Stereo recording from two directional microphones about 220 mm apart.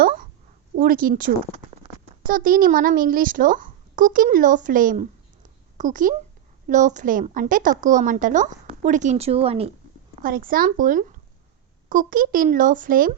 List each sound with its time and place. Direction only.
0.0 s a sound: 40° right (ahead or behind)
0.8 s a woman's voice: 40° right (ahead or behind)
10.2 s a woman's voice: 40° right (ahead or behind)